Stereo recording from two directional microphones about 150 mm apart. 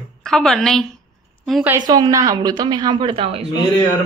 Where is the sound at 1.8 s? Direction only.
30° right (ahead or behind).